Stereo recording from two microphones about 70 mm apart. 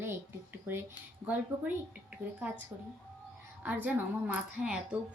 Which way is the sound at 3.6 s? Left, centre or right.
Right.